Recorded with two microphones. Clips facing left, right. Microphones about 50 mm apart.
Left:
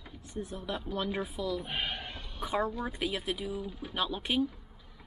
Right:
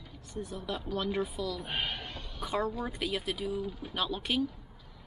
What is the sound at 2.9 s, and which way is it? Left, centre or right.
Speech, centre.